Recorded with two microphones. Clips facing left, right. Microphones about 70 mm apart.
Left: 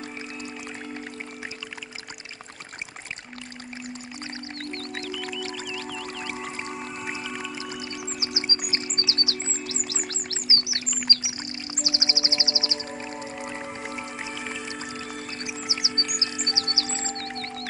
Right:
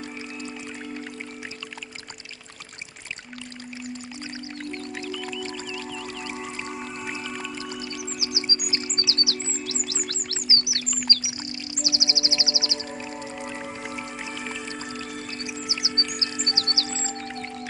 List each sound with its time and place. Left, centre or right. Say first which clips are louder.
4.7 s music: even; centre
5.1 s music: even; centre
7.8 s music: right 1 dB; left
8.2 s music: even; left
11.8 s music: right 1 dB; left
13.0 s music: even; centre
15.6 s music: right 1 dB; left
16.8 s music: even; centre